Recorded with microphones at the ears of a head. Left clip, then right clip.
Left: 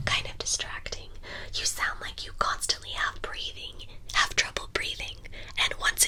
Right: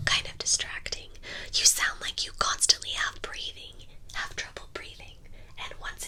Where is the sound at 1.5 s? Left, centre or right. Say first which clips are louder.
Right 5 dB; right.